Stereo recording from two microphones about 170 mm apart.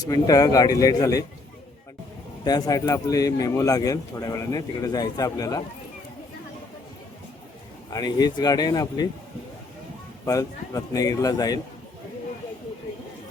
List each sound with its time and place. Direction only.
0.0 s speech: 20° left (ahead or behind)
2.4 s speech: 20° left (ahead or behind)
7.9 s speech: 20° left (ahead or behind)
10.2 s speech: 20° left (ahead or behind)